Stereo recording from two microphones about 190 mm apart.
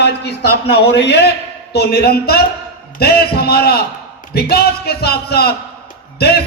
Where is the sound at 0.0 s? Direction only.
60° left (ahead or behind).